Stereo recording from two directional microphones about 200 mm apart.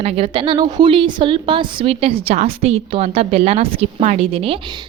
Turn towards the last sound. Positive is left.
turn(degrees=-30)  # may be behind; listen again after turning